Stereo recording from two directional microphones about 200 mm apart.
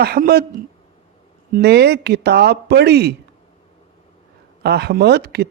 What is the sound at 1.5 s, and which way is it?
A man's voice, 55° right (ahead or behind).